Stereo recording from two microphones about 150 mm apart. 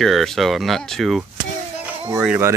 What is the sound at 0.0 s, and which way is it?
Speech, centre (ahead or behind).